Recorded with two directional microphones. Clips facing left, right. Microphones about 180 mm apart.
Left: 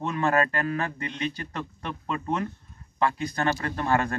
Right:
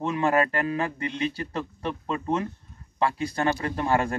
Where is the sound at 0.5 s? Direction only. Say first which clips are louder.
Right 2 dB; 25° right (ahead or behind).